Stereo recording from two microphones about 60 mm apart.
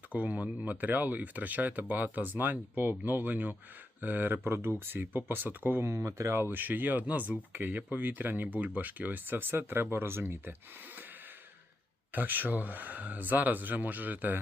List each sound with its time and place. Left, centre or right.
0.1 s speech: right
5.9 s speech: right
6.3 s speech: right
12.1 s speech: right